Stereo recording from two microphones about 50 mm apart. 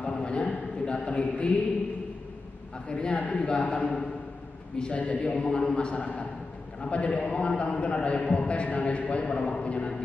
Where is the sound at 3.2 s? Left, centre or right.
Left.